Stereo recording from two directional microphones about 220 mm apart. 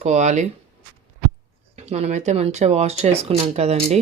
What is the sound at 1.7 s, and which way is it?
Speech, 30° right (ahead or behind).